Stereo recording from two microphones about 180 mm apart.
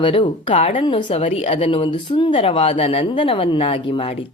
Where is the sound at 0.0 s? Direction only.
30° left (ahead or behind).